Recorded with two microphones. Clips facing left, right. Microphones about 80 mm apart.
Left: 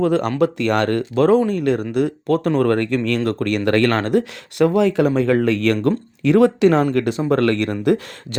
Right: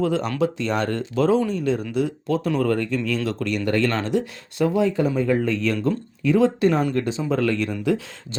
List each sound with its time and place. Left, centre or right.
0.0 s speech: left
6.9 s speech: left